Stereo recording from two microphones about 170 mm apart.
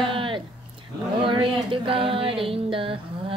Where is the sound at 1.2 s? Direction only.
30° right (ahead or behind).